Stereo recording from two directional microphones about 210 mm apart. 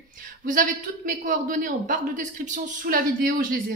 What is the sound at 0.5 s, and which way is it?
A man's voice, 40° right (ahead or behind).